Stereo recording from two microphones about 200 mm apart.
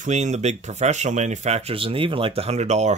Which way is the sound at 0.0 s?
35° right (ahead or behind).